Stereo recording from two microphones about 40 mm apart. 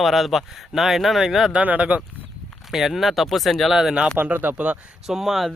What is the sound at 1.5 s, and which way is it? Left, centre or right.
Speech, right.